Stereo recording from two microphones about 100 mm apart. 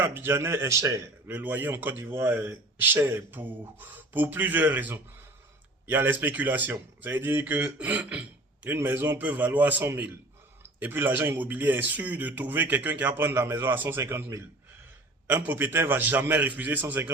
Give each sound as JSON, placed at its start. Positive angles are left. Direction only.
{"t": 0.0, "sound": "speech", "side_deg": -25}
{"t": 1.3, "sound": "speech", "side_deg": -15}